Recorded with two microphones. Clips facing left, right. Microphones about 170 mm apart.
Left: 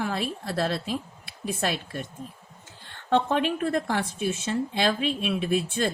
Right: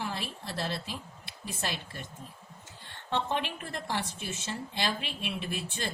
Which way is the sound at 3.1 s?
50° left (ahead or behind).